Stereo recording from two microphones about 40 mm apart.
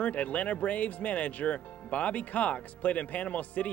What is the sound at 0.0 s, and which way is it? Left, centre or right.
Speech, left.